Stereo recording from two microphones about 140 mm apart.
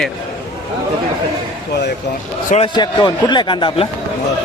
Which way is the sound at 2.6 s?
35° left (ahead or behind).